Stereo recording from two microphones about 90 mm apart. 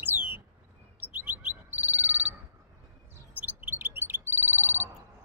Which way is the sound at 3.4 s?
20° right (ahead or behind).